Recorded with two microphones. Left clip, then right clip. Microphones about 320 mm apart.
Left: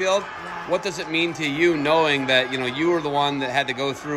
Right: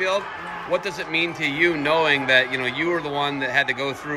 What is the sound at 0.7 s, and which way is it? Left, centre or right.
Speech, centre.